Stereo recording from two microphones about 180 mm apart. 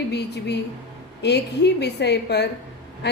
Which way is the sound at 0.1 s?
70° left (ahead or behind).